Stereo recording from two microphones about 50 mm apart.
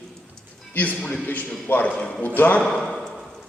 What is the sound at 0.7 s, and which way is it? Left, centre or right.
A man's voice, left.